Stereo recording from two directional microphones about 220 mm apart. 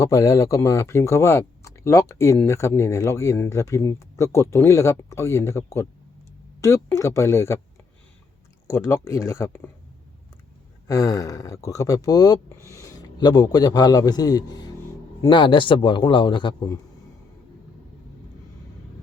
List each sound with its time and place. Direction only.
0.0 s speech: 15° left (ahead or behind)
8.7 s speech: 10° left (ahead or behind)
10.8 s a man's voice: 15° left (ahead or behind)